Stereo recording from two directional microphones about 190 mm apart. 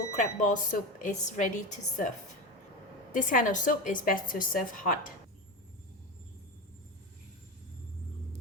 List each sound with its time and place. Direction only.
0.1 s a woman's voice: 40° left (ahead or behind)
3.1 s a woman's voice: 45° left (ahead or behind)